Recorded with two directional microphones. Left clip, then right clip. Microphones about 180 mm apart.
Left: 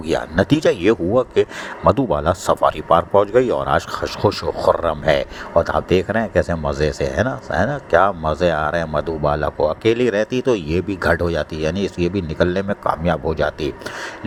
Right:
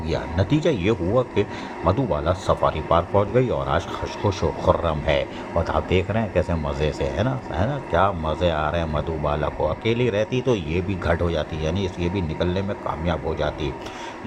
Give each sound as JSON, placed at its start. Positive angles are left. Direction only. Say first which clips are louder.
{"t": 0.1, "sound": "speech", "louder": "left 7 dB", "side_deg": 35}